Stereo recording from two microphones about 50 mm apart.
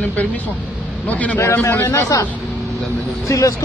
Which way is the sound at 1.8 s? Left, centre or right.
Left.